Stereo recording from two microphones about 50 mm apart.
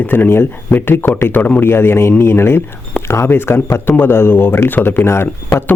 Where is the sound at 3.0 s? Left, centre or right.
Left.